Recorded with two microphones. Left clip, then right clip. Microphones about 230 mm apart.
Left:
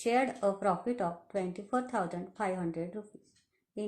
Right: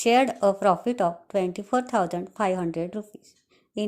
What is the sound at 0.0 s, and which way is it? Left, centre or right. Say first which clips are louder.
A woman's voice: right 9 dB; right.